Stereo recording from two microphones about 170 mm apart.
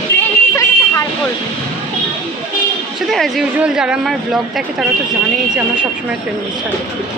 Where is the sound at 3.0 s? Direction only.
Centre (ahead or behind).